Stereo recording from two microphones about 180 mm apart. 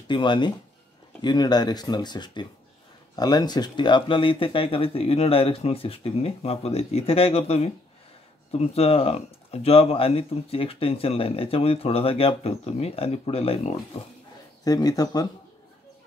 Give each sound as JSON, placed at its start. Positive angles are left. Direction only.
{"t": 0.1, "sound": "speech", "side_deg": 25}
{"t": 14.6, "sound": "speech", "side_deg": 20}